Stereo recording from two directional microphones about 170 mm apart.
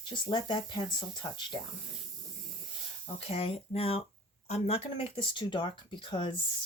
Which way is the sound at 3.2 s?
35° left (ahead or behind).